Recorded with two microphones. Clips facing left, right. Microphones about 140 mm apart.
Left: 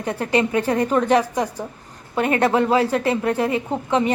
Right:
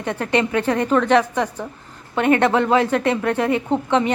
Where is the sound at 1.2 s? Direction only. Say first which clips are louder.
Right 1 dB; 10° left (ahead or behind).